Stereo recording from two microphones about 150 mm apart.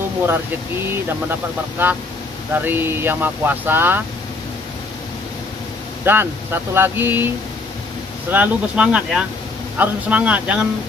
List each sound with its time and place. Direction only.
0.3 s speech: 15° right (ahead or behind)
6.0 s speech: 15° right (ahead or behind)
8.3 s speech: 10° right (ahead or behind)